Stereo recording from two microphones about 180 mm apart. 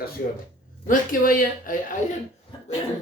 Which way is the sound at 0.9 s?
50° left (ahead or behind).